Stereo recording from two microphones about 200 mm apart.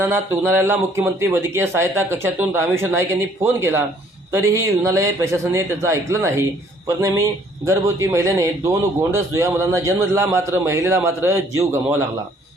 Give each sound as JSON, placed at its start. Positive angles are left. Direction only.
{"t": 0.0, "sound": "speech", "side_deg": -10}